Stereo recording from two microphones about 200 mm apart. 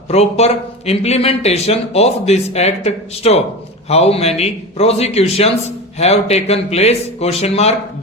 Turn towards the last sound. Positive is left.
turn(degrees=30)  # may be behind; listen again after turning